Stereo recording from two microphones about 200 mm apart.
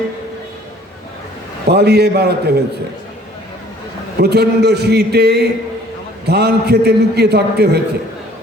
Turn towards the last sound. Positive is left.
turn(degrees=-55)  # may be behind; listen again after turning